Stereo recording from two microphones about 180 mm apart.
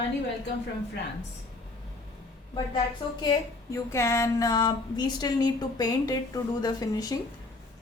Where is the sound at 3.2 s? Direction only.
20° left (ahead or behind).